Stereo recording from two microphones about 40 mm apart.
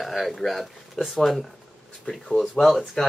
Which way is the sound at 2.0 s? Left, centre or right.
Centre.